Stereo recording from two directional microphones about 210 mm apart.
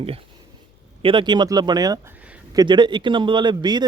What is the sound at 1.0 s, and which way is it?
Speech, 20° right (ahead or behind).